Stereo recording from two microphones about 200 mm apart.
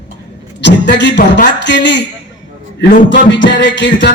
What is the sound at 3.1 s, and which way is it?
Music, 65° left (ahead or behind).